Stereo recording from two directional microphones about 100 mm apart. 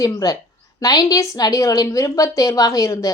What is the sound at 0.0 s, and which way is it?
A woman's voice, 40° left (ahead or behind).